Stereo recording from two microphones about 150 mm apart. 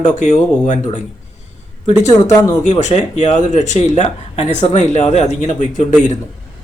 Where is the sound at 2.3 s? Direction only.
25° left (ahead or behind).